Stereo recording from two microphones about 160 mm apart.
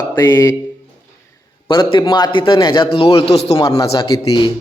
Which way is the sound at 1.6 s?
30° left (ahead or behind).